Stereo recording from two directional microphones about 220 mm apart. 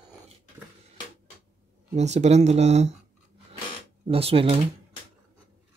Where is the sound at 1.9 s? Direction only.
30° right (ahead or behind).